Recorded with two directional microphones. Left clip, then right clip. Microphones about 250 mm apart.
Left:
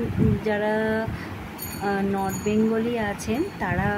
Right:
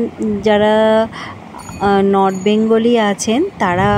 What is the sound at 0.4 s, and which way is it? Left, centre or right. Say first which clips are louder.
Speech: right 15 dB; right.